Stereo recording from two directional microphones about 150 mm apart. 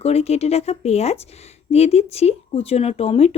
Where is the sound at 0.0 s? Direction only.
45° left (ahead or behind).